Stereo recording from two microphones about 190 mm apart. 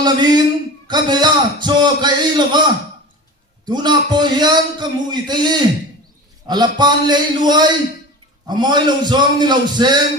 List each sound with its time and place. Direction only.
0.0 s a man's voice: 20° right (ahead or behind)
3.7 s a man's voice: 20° right (ahead or behind)